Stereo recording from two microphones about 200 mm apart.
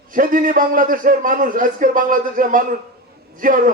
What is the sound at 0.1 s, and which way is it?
A man's voice, 45° right (ahead or behind).